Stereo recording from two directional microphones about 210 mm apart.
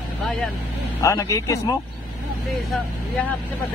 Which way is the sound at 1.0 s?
15° left (ahead or behind).